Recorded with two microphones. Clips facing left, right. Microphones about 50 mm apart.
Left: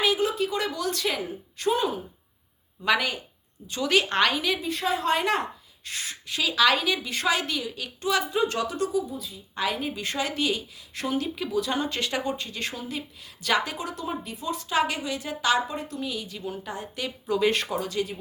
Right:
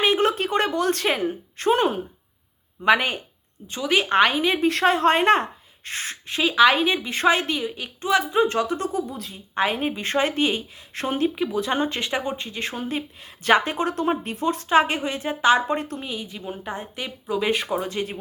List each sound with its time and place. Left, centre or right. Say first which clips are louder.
0.0 s speech: right 4 dB; right
2.8 s a woman's voice: right 5 dB; right
3.8 s speech: right 4 dB; centre
4.6 s a woman's voice: right 8 dB; right
9.0 s speech: right 2 dB; right
9.6 s a woman's voice: right 5 dB; right
15.6 s speech: right 7 dB; right
16.0 s speech: even; right
17.2 s speech: even; centre
17.7 s a woman's voice: right 2 dB; right